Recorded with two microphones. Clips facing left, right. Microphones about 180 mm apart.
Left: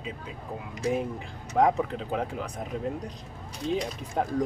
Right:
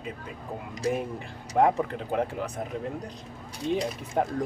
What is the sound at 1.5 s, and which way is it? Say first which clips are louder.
Speech: even; 5° right (ahead or behind).